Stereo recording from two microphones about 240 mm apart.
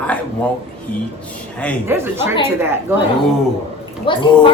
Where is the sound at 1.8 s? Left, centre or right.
Centre.